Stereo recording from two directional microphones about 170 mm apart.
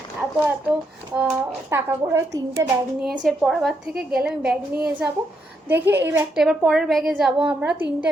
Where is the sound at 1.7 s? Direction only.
15° right (ahead or behind).